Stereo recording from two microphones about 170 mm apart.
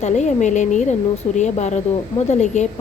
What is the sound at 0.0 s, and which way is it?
A woman's voice, 45° left (ahead or behind).